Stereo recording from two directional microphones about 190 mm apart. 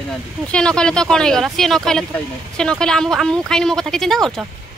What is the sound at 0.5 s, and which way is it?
Speech, 5° left (ahead or behind).